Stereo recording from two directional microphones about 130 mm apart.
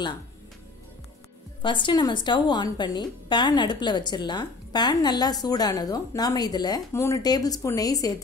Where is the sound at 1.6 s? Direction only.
40° left (ahead or behind).